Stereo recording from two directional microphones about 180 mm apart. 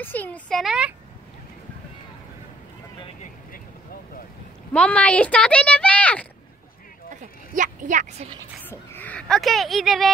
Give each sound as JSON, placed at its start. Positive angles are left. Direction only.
{"t": 0.0, "sound": "a sound", "side_deg": 10}
{"t": 4.7, "sound": "speech", "side_deg": 5}
{"t": 7.5, "sound": "speech", "side_deg": -45}
{"t": 8.6, "sound": "a woman's voice", "side_deg": 10}